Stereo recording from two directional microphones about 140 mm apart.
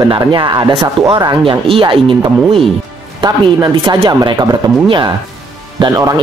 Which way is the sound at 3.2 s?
35° right (ahead or behind).